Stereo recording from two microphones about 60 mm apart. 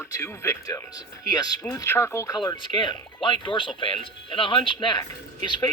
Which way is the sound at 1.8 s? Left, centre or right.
Left.